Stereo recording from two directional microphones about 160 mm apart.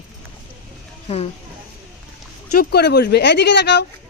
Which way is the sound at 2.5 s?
80° left.